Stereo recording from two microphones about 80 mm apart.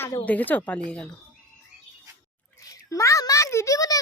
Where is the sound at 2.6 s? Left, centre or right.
Left.